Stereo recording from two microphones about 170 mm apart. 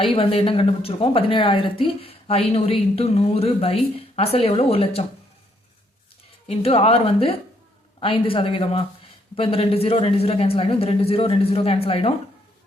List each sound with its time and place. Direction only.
0.0 s speech: 35° left (ahead or behind)
6.5 s speech: 35° left (ahead or behind)